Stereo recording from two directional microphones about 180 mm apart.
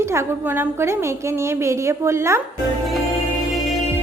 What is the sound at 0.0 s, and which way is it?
A woman's voice, 15° right (ahead or behind).